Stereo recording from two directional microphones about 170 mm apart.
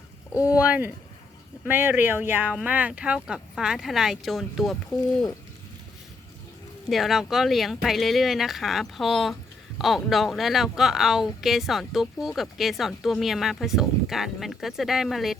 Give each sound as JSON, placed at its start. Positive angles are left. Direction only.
{"t": 0.3, "sound": "speech", "side_deg": 20}
{"t": 0.6, "sound": "a woman's voice", "side_deg": -10}
{"t": 6.9, "sound": "a woman's voice", "side_deg": 0}